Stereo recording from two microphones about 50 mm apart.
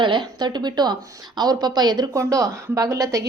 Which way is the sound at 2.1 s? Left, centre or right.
Right.